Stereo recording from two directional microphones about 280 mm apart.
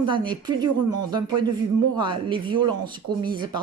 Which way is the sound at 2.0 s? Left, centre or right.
Centre.